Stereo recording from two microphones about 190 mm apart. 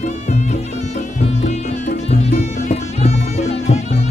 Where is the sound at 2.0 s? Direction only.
35° left (ahead or behind).